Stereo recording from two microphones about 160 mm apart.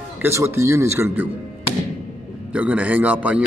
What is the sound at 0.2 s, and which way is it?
Speech, 15° right (ahead or behind).